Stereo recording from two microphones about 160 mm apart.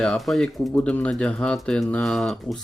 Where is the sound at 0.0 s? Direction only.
5° left (ahead or behind).